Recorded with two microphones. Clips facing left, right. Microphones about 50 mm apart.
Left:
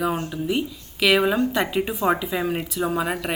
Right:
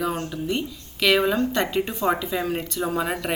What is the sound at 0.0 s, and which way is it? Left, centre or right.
Speech, centre.